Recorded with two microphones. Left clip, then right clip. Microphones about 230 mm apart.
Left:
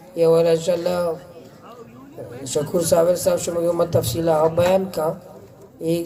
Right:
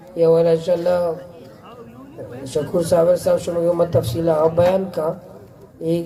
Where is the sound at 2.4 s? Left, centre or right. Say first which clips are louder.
Right 1 dB; left.